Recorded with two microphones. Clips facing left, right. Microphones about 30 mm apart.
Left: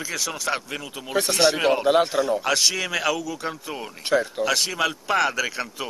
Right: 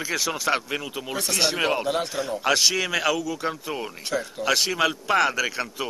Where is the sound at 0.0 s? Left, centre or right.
Centre.